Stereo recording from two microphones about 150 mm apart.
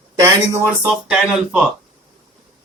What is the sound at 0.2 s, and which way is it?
Speech, 15° right (ahead or behind).